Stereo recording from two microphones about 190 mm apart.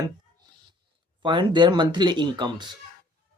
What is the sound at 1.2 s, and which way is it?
Speech, 25° right (ahead or behind).